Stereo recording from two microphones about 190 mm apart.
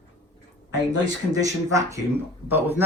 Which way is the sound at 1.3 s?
15° right (ahead or behind).